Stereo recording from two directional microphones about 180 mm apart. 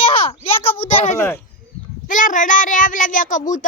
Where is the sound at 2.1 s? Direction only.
45° left (ahead or behind).